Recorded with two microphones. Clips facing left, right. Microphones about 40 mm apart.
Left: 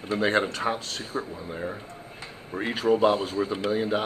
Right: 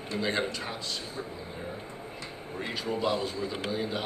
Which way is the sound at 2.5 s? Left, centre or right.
Left.